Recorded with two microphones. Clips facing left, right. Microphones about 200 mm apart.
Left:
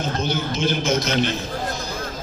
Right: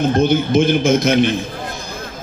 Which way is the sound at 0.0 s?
55° right (ahead or behind).